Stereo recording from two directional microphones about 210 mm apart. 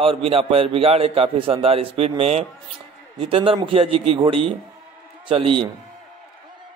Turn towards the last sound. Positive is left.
turn(degrees=-25)  # may be behind; listen again after turning